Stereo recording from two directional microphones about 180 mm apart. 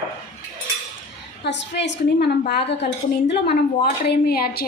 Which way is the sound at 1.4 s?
75° left (ahead or behind).